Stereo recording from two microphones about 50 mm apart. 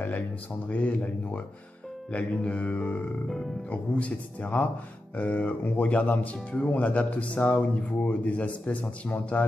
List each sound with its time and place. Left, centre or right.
0.7 s speech: left